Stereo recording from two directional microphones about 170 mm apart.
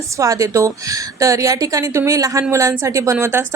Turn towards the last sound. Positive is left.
turn(degrees=-15)  # may be behind; listen again after turning